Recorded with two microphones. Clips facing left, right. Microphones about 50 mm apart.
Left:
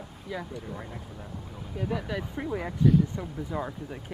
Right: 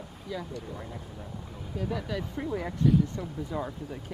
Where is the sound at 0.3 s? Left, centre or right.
Centre.